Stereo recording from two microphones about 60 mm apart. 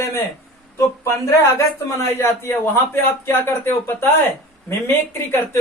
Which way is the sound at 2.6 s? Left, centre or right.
Left.